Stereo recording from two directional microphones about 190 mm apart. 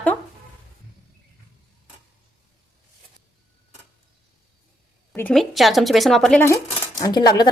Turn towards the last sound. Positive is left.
turn(degrees=20)  # may be behind; listen again after turning